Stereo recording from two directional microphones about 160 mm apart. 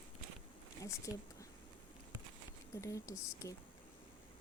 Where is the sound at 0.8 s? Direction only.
20° left (ahead or behind).